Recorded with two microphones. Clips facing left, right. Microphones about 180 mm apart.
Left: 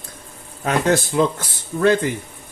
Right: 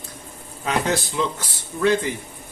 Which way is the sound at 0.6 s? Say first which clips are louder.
Left 4 dB; 50° left (ahead or behind).